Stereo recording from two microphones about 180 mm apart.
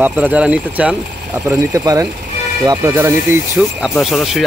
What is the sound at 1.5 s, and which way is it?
Speech, 20° right (ahead or behind).